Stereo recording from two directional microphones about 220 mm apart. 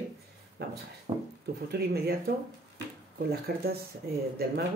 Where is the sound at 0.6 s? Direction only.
50° right (ahead or behind).